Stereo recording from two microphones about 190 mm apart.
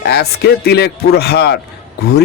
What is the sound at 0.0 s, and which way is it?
Speech, 55° left (ahead or behind).